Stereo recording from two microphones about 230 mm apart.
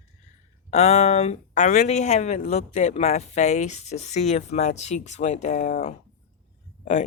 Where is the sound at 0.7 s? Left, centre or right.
Left.